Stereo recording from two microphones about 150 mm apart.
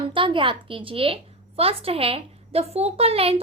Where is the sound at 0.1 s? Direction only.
35° right (ahead or behind).